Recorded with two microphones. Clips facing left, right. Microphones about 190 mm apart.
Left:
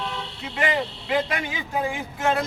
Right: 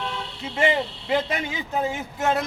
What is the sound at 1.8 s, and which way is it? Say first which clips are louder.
Speech: even; 20° right (ahead or behind).